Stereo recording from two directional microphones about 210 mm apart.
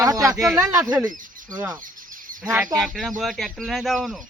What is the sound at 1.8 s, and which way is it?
Bird, 40° right (ahead or behind).